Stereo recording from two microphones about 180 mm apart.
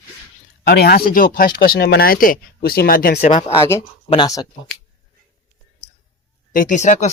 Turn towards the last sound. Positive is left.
turn(degrees=40)  # may be behind; listen again after turning